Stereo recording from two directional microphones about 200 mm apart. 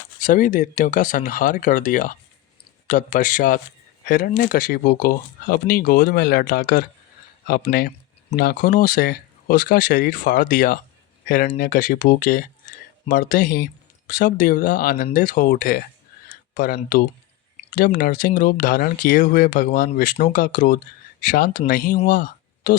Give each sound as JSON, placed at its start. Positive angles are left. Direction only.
{"t": 0.2, "sound": "speech", "side_deg": 40}